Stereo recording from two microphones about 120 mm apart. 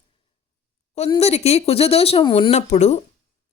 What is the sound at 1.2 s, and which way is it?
Speech, 60° left (ahead or behind).